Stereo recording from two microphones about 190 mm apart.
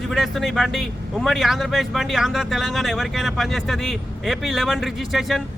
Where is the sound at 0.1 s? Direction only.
Centre (ahead or behind).